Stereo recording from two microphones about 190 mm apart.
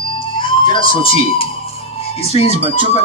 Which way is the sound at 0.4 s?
25° left (ahead or behind).